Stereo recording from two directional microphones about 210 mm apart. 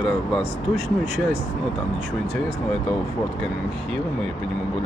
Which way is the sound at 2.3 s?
5° left (ahead or behind).